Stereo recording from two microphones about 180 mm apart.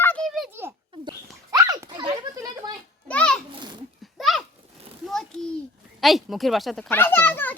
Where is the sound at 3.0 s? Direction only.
5° left (ahead or behind).